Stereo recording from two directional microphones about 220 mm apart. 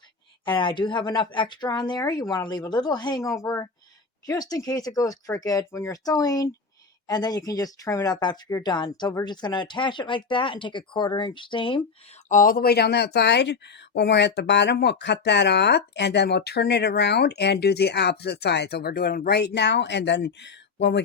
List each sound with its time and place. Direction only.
0.4 s speech: 20° left (ahead or behind)
12.3 s speech: 40° left (ahead or behind)